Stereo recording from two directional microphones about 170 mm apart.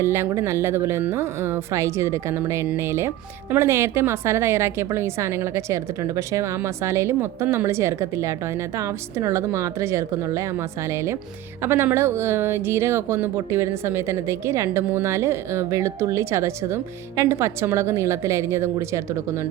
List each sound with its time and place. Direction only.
0.0 s speech: 15° right (ahead or behind)